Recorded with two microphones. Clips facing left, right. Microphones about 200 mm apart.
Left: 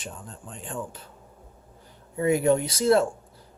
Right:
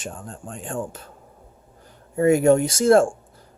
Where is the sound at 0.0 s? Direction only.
50° right (ahead or behind).